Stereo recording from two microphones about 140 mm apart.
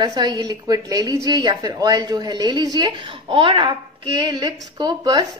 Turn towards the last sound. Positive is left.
turn(degrees=-30)  # may be behind; listen again after turning